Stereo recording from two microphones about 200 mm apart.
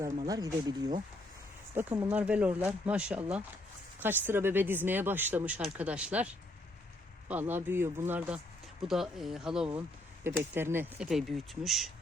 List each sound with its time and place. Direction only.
0.3 s speech: 20° right (ahead or behind)
1.7 s speech: 10° right (ahead or behind)